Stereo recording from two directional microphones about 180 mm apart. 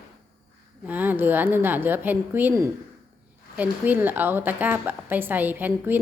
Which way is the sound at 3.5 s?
10° right (ahead or behind).